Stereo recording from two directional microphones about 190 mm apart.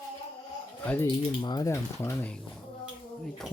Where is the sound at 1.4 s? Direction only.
20° left (ahead or behind).